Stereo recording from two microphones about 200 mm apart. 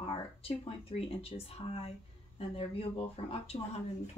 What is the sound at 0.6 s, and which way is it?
Speech, 30° left (ahead or behind).